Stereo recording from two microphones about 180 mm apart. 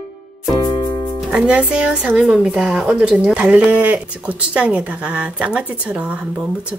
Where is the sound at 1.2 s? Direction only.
5° right (ahead or behind).